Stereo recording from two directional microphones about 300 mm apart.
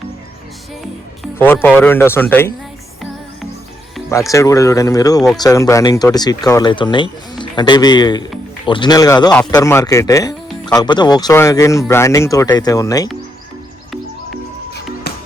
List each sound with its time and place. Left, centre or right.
1.2 s speech: centre
3.9 s music: centre
4.3 s speech: centre
15.1 s music: left